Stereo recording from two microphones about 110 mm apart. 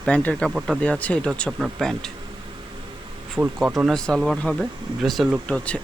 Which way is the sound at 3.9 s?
5° left (ahead or behind).